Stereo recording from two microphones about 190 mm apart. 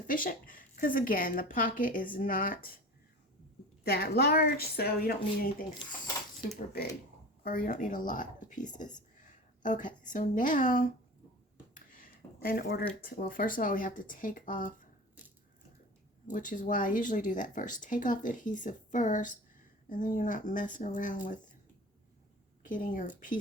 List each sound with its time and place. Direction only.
0.1 s speech: 45° left (ahead or behind)
3.8 s a woman's voice: 55° left (ahead or behind)
6.8 s a woman's voice: 50° left (ahead or behind)
11.7 s a sound: 45° left (ahead or behind)
13.1 s speech: 45° left (ahead or behind)
16.3 s speech: 45° left (ahead or behind)
22.6 s speech: 45° left (ahead or behind)